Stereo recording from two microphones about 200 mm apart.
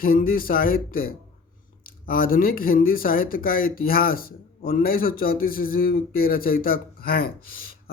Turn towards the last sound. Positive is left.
turn(degrees=50)  # may be behind; listen again after turning